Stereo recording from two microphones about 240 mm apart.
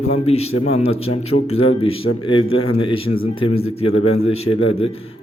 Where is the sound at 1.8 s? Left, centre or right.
Left.